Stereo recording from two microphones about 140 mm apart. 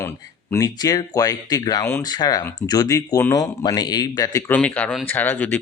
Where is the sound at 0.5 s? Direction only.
25° left (ahead or behind).